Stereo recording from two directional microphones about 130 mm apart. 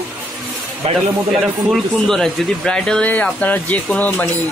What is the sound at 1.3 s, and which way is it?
A man's voice, centre (ahead or behind).